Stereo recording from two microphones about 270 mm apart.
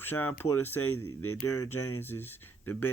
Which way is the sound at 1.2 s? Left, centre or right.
Left.